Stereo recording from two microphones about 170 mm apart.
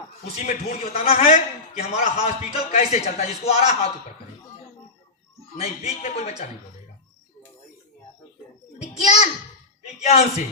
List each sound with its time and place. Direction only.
0.4 s a man's voice: 45° left (ahead or behind)
5.5 s a man's voice: 40° left (ahead or behind)
8.8 s children playing: 40° left (ahead or behind)
10.0 s a man's voice: 40° left (ahead or behind)